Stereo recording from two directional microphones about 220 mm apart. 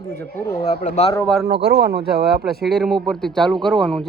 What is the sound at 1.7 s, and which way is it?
Speech, 45° right (ahead or behind).